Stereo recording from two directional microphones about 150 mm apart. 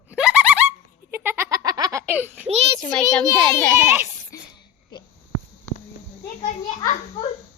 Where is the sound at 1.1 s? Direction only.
15° right (ahead or behind).